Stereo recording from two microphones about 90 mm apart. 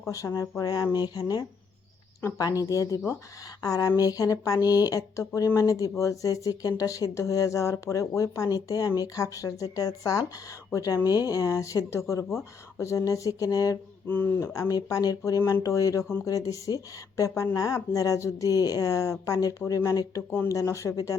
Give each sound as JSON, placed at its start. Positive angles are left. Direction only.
{"t": 0.0, "sound": "speech", "side_deg": 35}
{"t": 14.1, "sound": "speech", "side_deg": 25}
{"t": 15.4, "sound": "speech", "side_deg": 30}